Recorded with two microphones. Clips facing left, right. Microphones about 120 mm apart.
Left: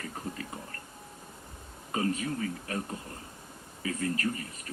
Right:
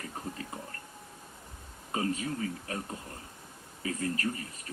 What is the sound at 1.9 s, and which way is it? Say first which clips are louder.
Speech: left 1 dB; 30° right (ahead or behind).